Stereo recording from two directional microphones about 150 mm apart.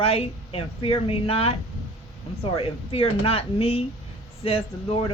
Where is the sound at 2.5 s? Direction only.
40° left (ahead or behind).